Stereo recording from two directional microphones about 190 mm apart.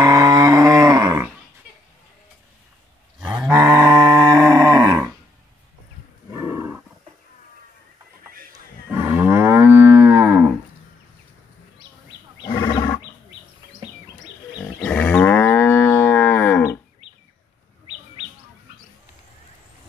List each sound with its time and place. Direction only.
0.0 s a sound: 15° right (ahead or behind)
3.2 s cattle: 5° right (ahead or behind)
3.5 s a sound: 15° right (ahead or behind)
6.3 s roaring cats: 10° right (ahead or behind)
8.9 s moo: 10° right (ahead or behind)
12.4 s wild animals: 20° left (ahead or behind)
14.8 s moo: 5° left (ahead or behind)